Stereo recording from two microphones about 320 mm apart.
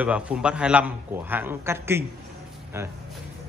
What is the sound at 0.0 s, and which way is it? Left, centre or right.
A man's voice, centre.